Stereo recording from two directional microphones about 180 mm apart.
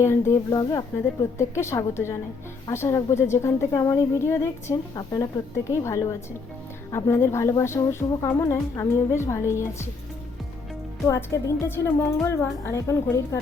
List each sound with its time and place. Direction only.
0.0 s speech: 15° left (ahead or behind)
11.0 s speech: 15° left (ahead or behind)